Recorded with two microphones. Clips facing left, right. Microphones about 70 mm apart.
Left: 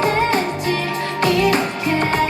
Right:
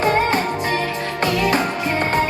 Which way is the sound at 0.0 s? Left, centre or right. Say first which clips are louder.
Even; right.